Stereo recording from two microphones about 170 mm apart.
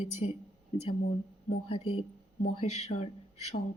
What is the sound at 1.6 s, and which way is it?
Speech, 35° left (ahead or behind).